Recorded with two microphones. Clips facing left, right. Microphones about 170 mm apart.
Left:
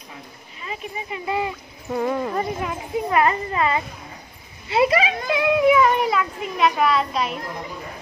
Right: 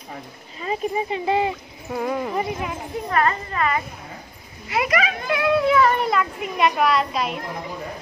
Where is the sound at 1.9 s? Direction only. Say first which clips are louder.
Left 2 dB; 5° right (ahead or behind).